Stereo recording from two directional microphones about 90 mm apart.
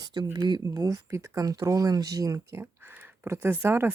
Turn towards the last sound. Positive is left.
turn(degrees=-25)  # may be behind; listen again after turning